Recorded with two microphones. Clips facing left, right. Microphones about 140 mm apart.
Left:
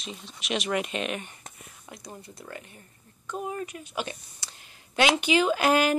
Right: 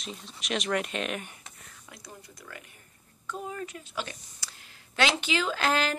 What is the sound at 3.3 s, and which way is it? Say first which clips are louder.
A woman's voice: left 3 dB; 20° left (ahead or behind).